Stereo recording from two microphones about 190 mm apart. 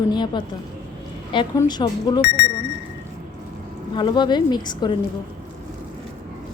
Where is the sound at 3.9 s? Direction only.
25° left (ahead or behind).